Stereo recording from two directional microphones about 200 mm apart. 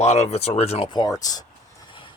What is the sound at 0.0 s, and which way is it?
Speech, 35° left (ahead or behind).